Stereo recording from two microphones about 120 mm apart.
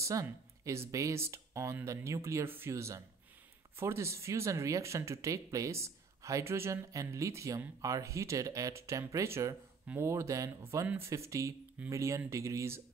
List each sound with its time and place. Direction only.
0.0 s speech: 25° right (ahead or behind)